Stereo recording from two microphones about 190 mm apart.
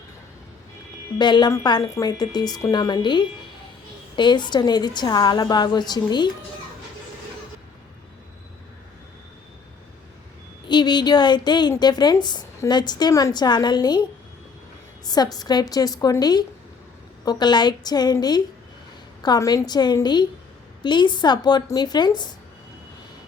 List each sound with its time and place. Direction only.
1.2 s a woman's voice: 25° left (ahead or behind)
10.7 s a woman's voice: 20° left (ahead or behind)
15.0 s a woman's voice: 20° left (ahead or behind)